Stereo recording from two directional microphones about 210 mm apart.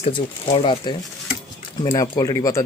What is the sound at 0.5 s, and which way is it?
Speech, 25° left (ahead or behind).